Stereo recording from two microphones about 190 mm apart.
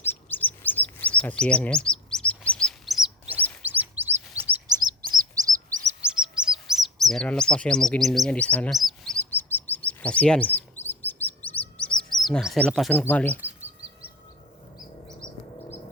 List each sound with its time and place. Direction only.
0.0 s chirp: 10° left (ahead or behind); by 5.5 s 20° right (ahead or behind)
6.0 s chirp: 5° right (ahead or behind)
7.1 s bird: 5° left (ahead or behind)
12.1 s speech: centre (ahead or behind)